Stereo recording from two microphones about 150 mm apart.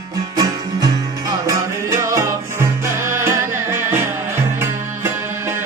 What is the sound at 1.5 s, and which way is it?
Music, 20° right (ahead or behind).